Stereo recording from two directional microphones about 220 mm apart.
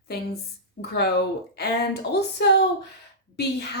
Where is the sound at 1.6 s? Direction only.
50° left (ahead or behind).